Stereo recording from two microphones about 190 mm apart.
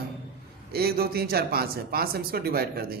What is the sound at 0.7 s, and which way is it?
Speech, 55° right (ahead or behind).